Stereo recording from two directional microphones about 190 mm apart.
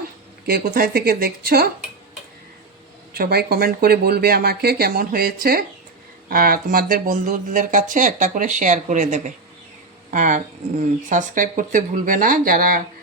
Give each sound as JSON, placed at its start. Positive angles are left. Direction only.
{"t": 0.4, "sound": "speech", "side_deg": -50}
{"t": 3.1, "sound": "speech", "side_deg": -55}